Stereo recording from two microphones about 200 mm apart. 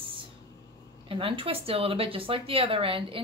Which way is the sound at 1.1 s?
25° right (ahead or behind).